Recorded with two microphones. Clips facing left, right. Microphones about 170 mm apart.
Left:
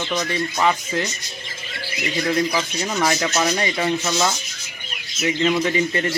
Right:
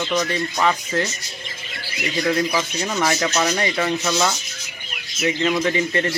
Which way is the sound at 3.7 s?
10° left (ahead or behind).